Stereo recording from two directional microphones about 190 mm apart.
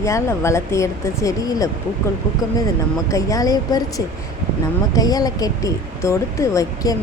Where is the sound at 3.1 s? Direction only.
15° left (ahead or behind).